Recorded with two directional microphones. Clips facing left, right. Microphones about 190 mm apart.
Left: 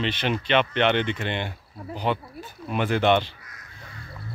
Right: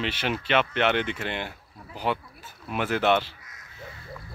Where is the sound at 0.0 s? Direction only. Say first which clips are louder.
Left 3 dB; 5° right (ahead or behind).